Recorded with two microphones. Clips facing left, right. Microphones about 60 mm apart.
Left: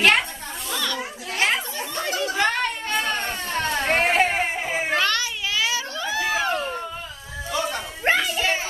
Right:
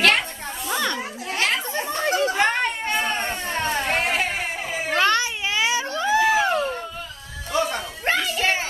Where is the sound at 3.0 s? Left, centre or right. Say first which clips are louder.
Right 1 dB; right.